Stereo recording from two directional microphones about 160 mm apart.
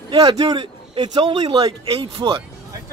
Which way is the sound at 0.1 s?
25° right (ahead or behind).